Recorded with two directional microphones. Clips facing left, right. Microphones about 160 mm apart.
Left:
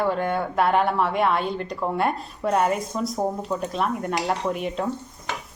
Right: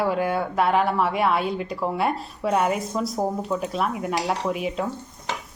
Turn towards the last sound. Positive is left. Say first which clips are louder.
# even
turn(degrees=-5)  # may be behind; listen again after turning